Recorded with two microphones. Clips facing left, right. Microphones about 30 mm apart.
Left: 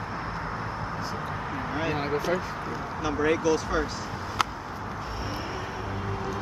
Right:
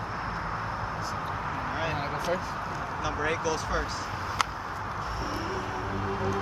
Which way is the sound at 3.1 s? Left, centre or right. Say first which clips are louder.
Left 6 dB; centre.